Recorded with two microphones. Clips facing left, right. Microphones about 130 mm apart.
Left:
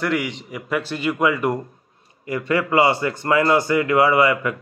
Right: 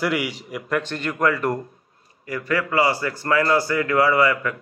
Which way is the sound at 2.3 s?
25° left (ahead or behind).